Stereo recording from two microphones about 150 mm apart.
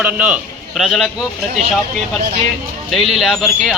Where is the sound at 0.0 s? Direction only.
10° right (ahead or behind).